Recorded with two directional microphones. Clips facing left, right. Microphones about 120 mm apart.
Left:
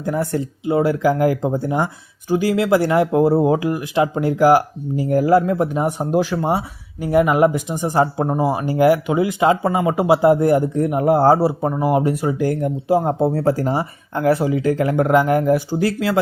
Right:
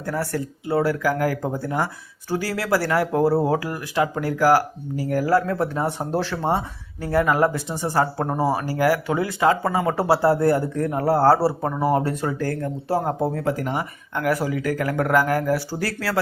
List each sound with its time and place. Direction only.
0.0 s speech: 20° left (ahead or behind)